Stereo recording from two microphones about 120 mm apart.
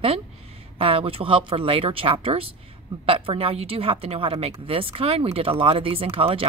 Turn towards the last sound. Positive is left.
turn(degrees=-50)  # may be behind; listen again after turning